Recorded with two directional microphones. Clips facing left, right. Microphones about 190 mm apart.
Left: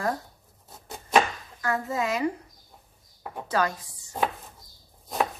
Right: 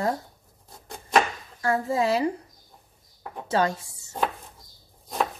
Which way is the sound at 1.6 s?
30° right (ahead or behind).